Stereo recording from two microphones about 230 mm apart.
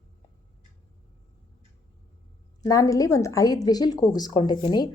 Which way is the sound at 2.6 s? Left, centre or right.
Centre.